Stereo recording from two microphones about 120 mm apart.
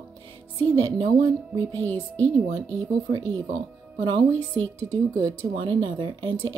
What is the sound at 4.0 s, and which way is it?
Speech, 45° right (ahead or behind).